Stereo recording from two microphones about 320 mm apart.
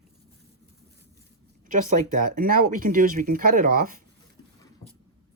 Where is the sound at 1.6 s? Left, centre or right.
Right.